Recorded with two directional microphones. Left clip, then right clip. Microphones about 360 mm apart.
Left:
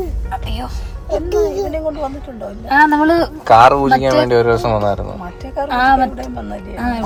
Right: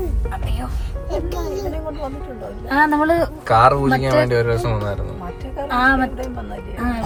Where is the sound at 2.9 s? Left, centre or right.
Centre.